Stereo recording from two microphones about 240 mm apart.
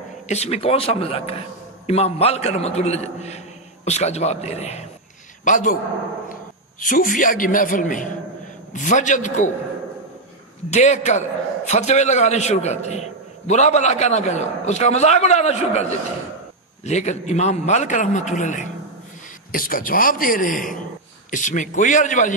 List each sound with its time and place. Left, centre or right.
0.3 s a man's voice: left
6.8 s a man's voice: left
10.7 s a man's voice: left
16.8 s a man's voice: left